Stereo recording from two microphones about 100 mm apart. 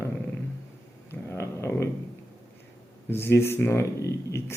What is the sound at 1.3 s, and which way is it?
Speech, 25° left (ahead or behind).